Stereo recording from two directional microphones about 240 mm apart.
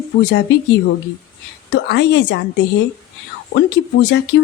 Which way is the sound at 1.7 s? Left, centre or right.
Left.